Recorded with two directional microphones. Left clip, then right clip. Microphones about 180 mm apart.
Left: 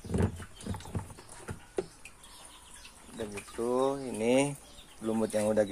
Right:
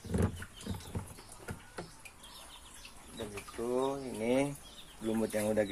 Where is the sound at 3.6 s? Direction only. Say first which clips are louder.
Left 4 dB; 55° left (ahead or behind); by 4.5 s 35° left (ahead or behind).